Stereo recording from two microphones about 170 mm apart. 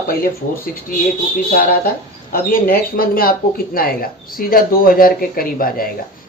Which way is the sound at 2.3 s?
55° left (ahead or behind).